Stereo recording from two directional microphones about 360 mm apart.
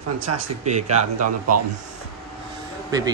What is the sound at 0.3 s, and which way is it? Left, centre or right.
Speech, right.